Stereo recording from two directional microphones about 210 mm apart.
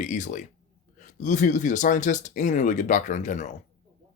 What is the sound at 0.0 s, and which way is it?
Speech, 35° left (ahead or behind).